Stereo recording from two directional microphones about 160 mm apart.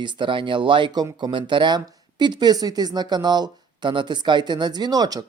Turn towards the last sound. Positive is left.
turn(degrees=-25)  # may be behind; listen again after turning